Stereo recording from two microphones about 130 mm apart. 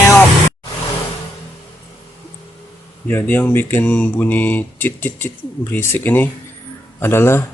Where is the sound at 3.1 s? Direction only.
15° left (ahead or behind).